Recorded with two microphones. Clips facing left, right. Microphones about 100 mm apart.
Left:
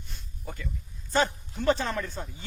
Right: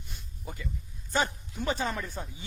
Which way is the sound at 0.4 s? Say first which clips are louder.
Left 1 dB; 5° right (ahead or behind).